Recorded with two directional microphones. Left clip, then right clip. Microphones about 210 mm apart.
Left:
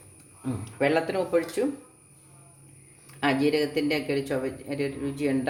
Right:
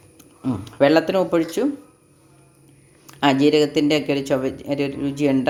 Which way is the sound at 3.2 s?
40° right (ahead or behind).